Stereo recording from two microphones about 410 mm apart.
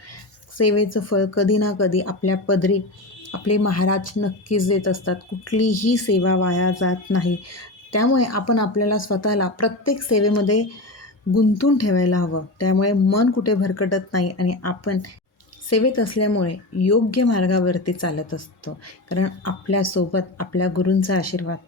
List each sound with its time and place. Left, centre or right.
0.5 s speech: left